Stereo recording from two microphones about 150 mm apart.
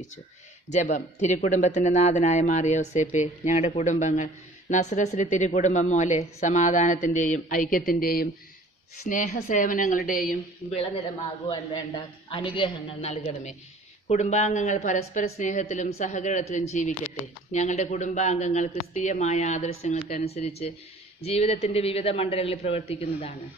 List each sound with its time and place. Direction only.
0.7 s speech: 50° left (ahead or behind); by 8.3 s 75° left (ahead or behind)
9.1 s speech: 55° left (ahead or behind)
10.7 s a man's voice: 45° left (ahead or behind)
13.1 s a man's voice: 50° left (ahead or behind)